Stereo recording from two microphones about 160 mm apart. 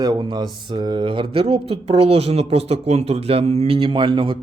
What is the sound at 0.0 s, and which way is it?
Speech, 25° right (ahead or behind).